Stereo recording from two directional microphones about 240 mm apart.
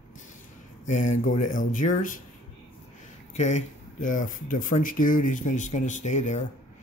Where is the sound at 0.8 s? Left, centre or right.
Left.